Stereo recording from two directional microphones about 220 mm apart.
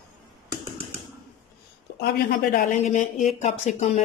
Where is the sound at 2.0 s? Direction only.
40° left (ahead or behind).